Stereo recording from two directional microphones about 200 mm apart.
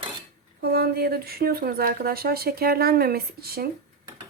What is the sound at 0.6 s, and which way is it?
Speech, 50° right (ahead or behind).